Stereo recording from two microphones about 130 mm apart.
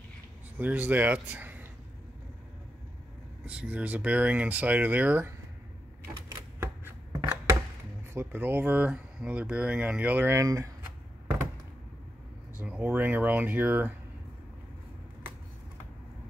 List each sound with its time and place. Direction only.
0.6 s speech: 15° right (ahead or behind)
1.3 s a sound: 15° right (ahead or behind)
3.4 s speech: 10° right (ahead or behind)
6.1 s typewriter: 20° right (ahead or behind)
8.1 s speech: 15° right (ahead or behind)
12.5 s speech: 10° right (ahead or behind)